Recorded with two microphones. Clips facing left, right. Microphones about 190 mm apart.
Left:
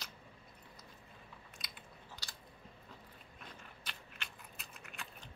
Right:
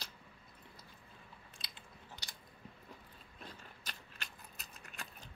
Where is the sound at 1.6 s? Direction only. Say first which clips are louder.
Left 1 dB; 25° right (ahead or behind).